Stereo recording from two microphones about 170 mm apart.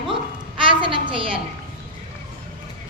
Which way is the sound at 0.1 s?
30° right (ahead or behind).